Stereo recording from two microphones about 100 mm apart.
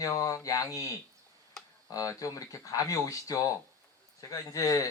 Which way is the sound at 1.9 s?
35° left (ahead or behind).